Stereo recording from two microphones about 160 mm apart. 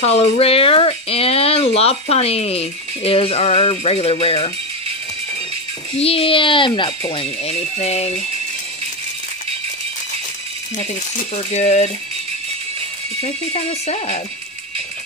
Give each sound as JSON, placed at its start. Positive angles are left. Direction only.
{"t": 0.0, "sound": "speech", "side_deg": 40}
{"t": 5.9, "sound": "speech", "side_deg": 35}
{"t": 10.8, "sound": "speech", "side_deg": 45}
{"t": 13.2, "sound": "speech", "side_deg": 40}